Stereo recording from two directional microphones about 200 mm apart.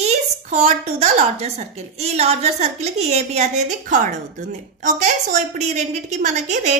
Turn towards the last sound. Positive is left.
turn(degrees=-35)  # may be behind; listen again after turning